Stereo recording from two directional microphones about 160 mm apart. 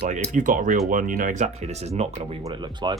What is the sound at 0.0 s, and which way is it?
Speech, 50° right (ahead or behind).